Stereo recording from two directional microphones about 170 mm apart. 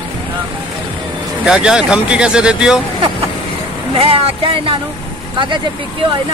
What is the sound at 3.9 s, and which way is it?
Speech, 35° right (ahead or behind).